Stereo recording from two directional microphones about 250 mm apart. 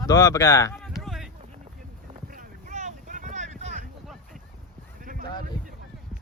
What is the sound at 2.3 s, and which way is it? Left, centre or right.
Boat, right.